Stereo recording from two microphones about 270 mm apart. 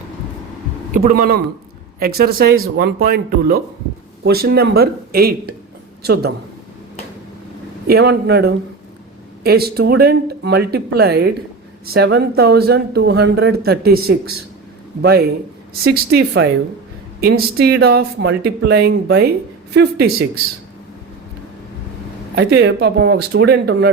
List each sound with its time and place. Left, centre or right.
0.9 s speech: right
7.9 s speech: right
22.4 s speech: right